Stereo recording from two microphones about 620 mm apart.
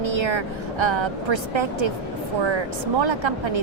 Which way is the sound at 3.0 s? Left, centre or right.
Right.